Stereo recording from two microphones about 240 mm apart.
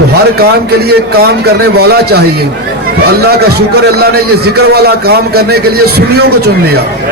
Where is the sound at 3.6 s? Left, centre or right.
Right.